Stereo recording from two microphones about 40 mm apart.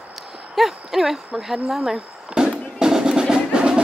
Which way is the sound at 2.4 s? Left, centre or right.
Centre.